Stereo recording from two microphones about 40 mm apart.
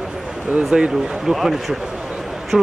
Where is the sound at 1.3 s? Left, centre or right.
Centre.